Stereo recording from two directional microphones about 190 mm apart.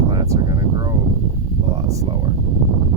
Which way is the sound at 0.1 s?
20° right (ahead or behind).